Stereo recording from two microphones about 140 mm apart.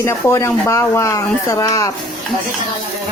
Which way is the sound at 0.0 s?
20° left (ahead or behind).